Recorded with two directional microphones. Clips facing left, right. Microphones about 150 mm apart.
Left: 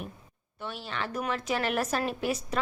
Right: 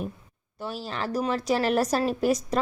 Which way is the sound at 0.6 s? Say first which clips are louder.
Right 4 dB; 35° right (ahead or behind).